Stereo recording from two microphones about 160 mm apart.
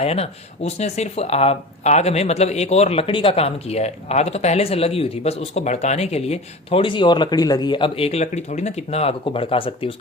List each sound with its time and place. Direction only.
0.0 s speech: 40° left (ahead or behind)